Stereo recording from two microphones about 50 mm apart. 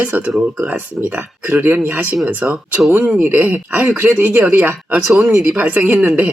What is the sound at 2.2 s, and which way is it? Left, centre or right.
Speech, right.